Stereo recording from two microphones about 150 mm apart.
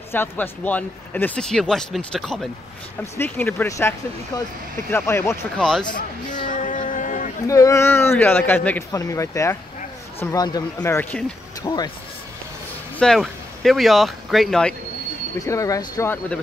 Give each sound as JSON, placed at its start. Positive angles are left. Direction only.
{"t": 0.1, "sound": "speech", "side_deg": 15}
{"t": 3.0, "sound": "a man's voice", "side_deg": 15}
{"t": 4.9, "sound": "a man's voice", "side_deg": 15}
{"t": 5.6, "sound": "speech", "side_deg": 5}
{"t": 6.5, "sound": "a sound", "side_deg": 60}
{"t": 7.4, "sound": "a man's voice", "side_deg": 20}
{"t": 11.0, "sound": "a man's voice", "side_deg": 10}
{"t": 11.6, "sound": "speech", "side_deg": 25}
{"t": 13.0, "sound": "speech", "side_deg": 0}
{"t": 15.3, "sound": "speech", "side_deg": 20}